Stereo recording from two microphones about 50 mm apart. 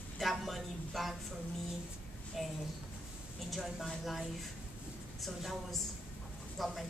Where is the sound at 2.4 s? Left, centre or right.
Centre.